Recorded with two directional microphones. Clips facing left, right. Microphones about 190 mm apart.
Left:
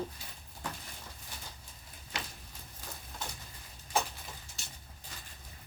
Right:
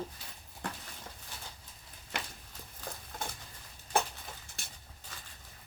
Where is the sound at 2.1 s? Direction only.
55° right (ahead or behind).